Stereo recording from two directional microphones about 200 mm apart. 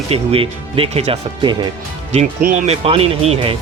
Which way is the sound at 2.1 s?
35° right (ahead or behind).